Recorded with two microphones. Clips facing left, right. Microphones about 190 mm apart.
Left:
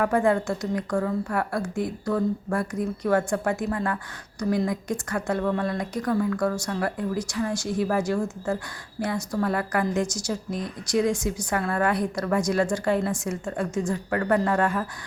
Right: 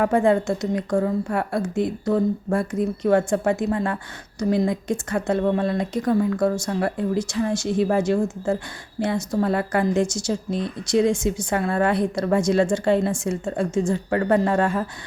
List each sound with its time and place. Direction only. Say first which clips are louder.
0.0 s a woman's voice: right 3 dB; 25° right (ahead or behind)